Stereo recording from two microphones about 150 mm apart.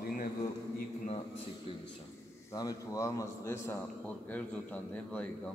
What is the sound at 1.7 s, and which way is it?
Speech, 40° left (ahead or behind).